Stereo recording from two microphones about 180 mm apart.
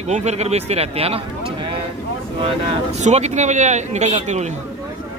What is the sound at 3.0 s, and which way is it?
Speech, 40° right (ahead or behind).